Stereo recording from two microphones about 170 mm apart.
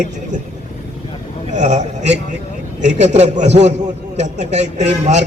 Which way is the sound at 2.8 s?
45° right (ahead or behind).